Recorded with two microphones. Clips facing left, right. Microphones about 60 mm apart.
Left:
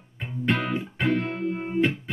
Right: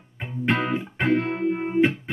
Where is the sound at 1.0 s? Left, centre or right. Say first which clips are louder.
Right 3 dB; right.